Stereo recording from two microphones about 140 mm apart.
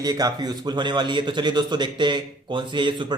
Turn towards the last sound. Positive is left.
turn(degrees=-35)  # may be behind; listen again after turning